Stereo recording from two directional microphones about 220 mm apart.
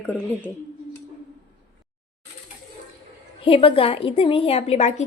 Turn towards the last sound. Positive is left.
turn(degrees=30)  # may be behind; listen again after turning